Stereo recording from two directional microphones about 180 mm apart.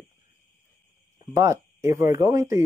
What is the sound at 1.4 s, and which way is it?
Speech, 15° right (ahead or behind).